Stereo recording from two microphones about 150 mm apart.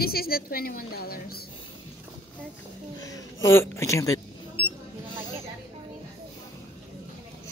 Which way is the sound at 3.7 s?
20° left (ahead or behind).